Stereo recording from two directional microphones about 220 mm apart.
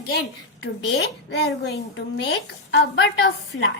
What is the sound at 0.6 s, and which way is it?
A woman's voice, 55° left (ahead or behind).